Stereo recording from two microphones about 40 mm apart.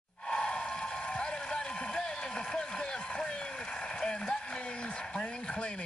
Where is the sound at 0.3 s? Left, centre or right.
Left.